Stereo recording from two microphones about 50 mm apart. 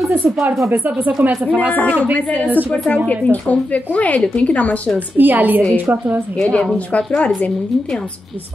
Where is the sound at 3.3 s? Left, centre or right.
Left.